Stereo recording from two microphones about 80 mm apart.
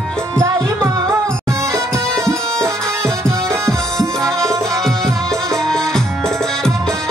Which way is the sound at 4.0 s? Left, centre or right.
Centre.